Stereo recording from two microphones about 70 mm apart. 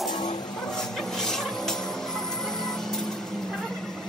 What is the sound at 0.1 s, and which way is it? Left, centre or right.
Music, left.